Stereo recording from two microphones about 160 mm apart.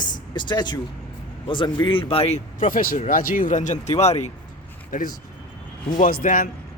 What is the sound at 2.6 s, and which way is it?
Speech, 60° left (ahead or behind).